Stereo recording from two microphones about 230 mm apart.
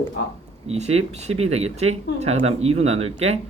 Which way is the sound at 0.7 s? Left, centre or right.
Right.